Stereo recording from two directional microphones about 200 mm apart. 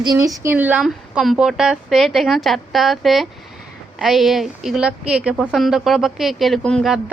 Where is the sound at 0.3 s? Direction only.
10° right (ahead or behind).